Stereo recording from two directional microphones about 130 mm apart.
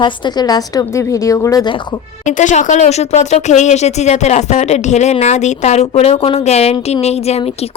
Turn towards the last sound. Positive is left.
turn(degrees=50)  # may be behind; listen again after turning